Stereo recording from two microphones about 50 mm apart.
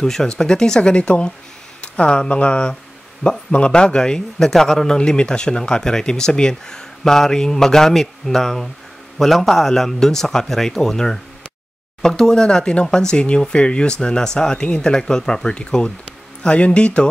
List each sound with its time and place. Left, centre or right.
0.0 s a man's voice: centre